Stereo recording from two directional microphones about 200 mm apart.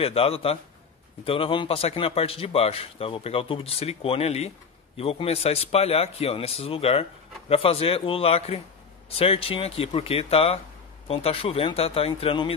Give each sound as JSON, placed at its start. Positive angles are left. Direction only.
{"t": 0.0, "sound": "a man's voice", "side_deg": 30}